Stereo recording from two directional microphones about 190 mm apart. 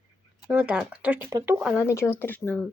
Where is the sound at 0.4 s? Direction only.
5° right (ahead or behind).